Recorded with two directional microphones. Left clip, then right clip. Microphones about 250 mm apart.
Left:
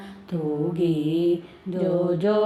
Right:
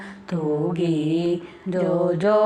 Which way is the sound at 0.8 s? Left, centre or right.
Right.